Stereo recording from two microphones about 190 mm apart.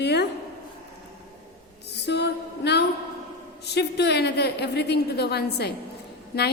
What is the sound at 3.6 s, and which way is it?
A woman's voice, 60° left (ahead or behind).